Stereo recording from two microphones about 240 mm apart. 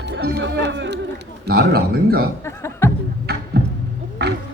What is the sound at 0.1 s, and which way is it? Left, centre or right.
Speech, right.